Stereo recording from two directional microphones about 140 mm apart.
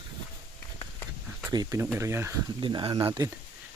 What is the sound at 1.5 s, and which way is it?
Speech, 25° right (ahead or behind).